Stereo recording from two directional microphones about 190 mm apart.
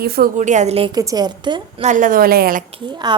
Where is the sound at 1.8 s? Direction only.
40° right (ahead or behind).